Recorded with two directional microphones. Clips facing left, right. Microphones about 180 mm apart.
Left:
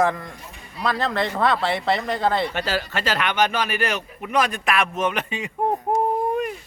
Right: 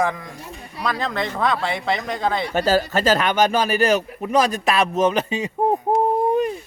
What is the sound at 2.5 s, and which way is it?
Speech, 40° right (ahead or behind).